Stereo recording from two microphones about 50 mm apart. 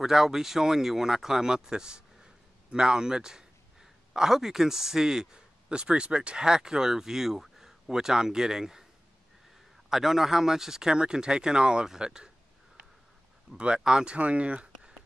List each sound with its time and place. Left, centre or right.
0.0 s speech: centre
9.8 s speech: centre
13.7 s speech: centre
14.1 s speech: right